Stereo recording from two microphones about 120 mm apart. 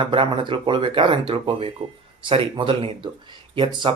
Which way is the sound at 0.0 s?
45° right (ahead or behind).